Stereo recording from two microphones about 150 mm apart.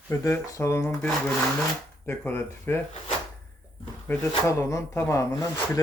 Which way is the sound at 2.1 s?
15° left (ahead or behind).